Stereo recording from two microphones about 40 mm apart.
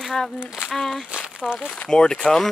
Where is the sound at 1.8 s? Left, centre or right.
Centre.